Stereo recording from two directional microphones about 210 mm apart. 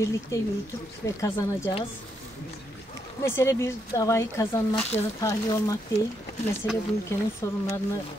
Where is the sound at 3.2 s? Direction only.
15° left (ahead or behind).